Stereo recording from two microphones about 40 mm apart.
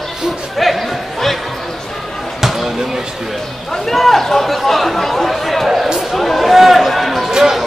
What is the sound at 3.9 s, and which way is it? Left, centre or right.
Chatter, centre.